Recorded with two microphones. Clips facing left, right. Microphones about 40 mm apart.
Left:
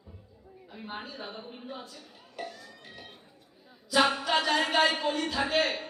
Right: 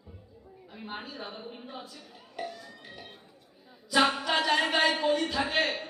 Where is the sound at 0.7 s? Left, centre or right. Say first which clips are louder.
Even; centre.